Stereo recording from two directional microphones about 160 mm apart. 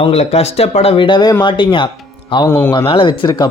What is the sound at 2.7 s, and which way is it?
Speech, 35° left (ahead or behind).